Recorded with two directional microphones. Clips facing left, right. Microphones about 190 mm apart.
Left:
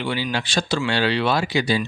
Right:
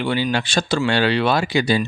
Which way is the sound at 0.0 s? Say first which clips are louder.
Right 4 dB; 55° right (ahead or behind).